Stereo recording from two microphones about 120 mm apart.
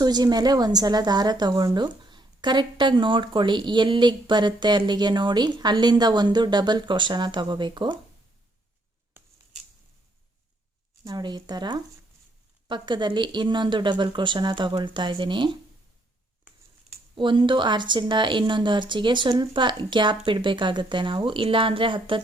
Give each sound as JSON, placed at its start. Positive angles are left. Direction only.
{"t": 0.0, "sound": "a woman's voice", "side_deg": -35}
{"t": 11.0, "sound": "a woman's voice", "side_deg": -35}
{"t": 17.2, "sound": "a woman's voice", "side_deg": -40}